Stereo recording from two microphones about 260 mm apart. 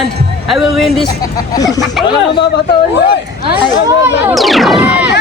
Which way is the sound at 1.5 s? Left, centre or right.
Centre.